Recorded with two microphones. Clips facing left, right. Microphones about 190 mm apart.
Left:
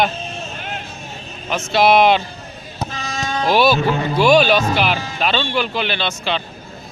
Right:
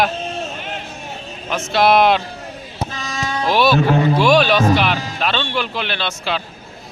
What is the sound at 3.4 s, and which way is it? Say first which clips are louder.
Speech: even; centre (ahead or behind).